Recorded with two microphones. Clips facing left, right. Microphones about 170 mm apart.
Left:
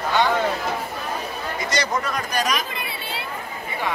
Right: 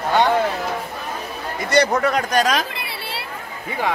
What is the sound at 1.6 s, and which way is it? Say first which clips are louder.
Speech: right 9 dB; 60° right (ahead or behind).